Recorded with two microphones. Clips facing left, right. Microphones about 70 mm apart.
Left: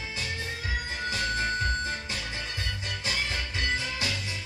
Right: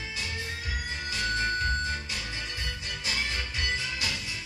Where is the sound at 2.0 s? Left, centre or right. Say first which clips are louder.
Left 1 dB; left.